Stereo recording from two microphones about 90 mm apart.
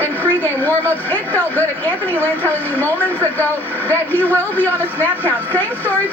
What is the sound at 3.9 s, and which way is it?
A woman's voice, 20° left (ahead or behind).